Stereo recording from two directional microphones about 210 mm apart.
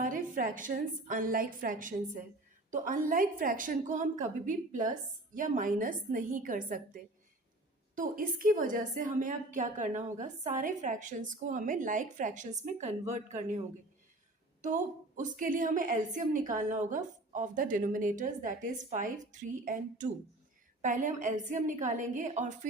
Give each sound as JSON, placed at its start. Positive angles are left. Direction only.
{"t": 0.0, "sound": "a woman's voice", "side_deg": -40}
{"t": 14.6, "sound": "a woman's voice", "side_deg": -35}